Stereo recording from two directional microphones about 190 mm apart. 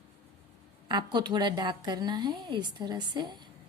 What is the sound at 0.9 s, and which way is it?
A woman's voice, 20° right (ahead or behind).